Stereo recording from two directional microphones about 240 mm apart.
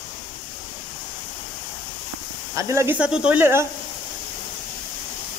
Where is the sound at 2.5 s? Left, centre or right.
Centre.